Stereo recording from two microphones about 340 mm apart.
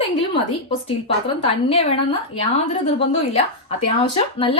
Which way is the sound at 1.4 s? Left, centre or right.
Centre.